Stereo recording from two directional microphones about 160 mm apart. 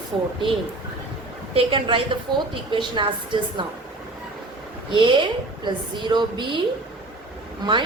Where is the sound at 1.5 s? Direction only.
30° right (ahead or behind).